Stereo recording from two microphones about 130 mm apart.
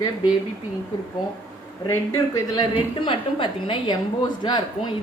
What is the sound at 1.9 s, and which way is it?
Speech, 25° left (ahead or behind).